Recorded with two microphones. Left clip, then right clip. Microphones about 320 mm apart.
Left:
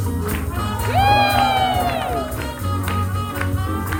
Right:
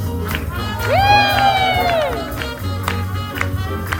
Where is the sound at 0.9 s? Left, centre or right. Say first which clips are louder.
Right 3 dB; centre.